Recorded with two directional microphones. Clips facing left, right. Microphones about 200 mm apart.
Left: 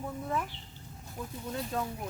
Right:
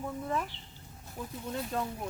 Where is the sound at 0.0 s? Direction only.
Centre (ahead or behind).